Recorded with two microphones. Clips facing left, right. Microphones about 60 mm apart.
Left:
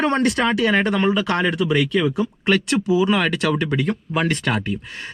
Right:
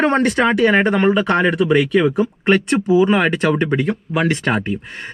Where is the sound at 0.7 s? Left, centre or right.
Right.